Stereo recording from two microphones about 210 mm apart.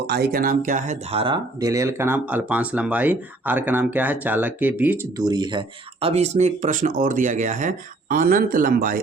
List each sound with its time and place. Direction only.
0.1 s speech: 45° right (ahead or behind); by 5.2 s 10° right (ahead or behind)
5.2 s speech: 20° right (ahead or behind); by 9.0 s 40° right (ahead or behind)